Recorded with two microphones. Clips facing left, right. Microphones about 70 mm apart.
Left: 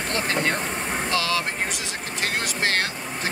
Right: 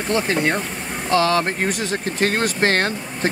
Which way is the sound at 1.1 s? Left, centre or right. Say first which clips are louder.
Right 10 dB; right.